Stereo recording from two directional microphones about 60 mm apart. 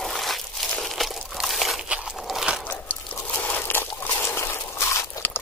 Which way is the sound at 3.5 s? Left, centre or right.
Left.